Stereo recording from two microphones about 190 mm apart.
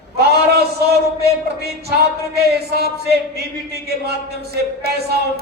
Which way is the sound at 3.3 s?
55° right (ahead or behind).